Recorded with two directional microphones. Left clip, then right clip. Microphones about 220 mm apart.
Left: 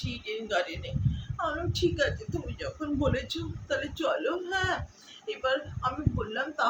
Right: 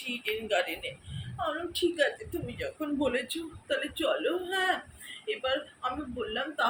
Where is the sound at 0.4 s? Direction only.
10° left (ahead or behind).